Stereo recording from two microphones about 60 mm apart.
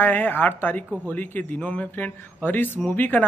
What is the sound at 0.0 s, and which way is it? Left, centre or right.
Speech, left.